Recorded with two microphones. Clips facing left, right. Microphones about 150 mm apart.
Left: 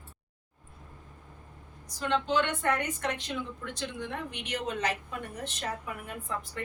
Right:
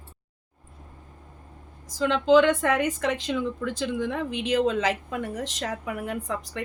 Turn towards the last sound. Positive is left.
turn(degrees=-90)